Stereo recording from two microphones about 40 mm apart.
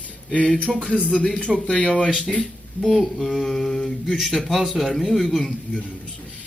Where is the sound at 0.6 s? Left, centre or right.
Left.